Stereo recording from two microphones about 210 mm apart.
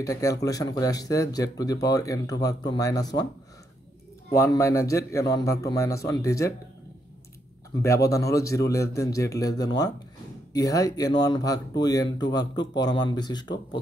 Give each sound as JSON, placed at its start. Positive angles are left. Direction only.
{"t": 0.0, "sound": "speech", "side_deg": 15}
{"t": 4.4, "sound": "speech", "side_deg": 15}
{"t": 7.8, "sound": "speech", "side_deg": 15}